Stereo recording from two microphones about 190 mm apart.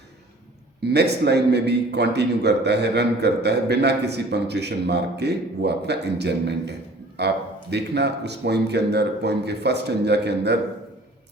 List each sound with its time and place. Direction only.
0.8 s a man's voice: 60° right (ahead or behind)